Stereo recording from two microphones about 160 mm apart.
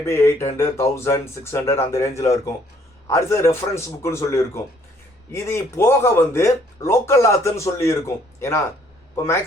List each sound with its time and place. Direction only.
0.0 s speech: 15° left (ahead or behind)